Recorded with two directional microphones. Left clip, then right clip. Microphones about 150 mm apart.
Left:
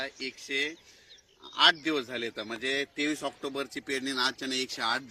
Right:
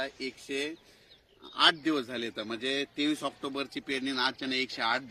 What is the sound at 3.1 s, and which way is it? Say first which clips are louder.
Speech: even; 90° right.